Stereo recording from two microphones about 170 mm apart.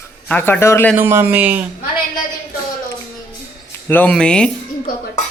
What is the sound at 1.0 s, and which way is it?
Speech, 15° right (ahead or behind).